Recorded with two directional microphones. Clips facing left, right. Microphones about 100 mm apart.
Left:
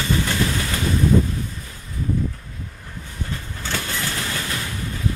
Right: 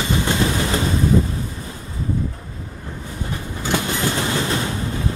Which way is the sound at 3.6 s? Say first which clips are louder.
Right 7 dB; 20° right (ahead or behind).